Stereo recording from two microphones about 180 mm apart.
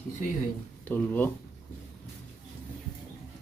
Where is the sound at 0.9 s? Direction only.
10° left (ahead or behind).